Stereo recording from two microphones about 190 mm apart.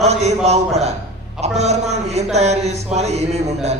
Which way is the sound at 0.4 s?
35° right (ahead or behind).